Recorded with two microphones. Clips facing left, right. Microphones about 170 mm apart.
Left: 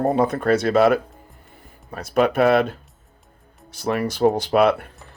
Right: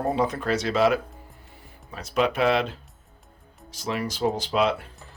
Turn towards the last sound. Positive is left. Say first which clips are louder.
# left 6 dB
turn(degrees=60)  # may be behind; listen again after turning